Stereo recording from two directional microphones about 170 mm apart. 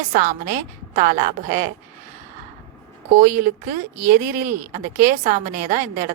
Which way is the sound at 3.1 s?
50° right (ahead or behind).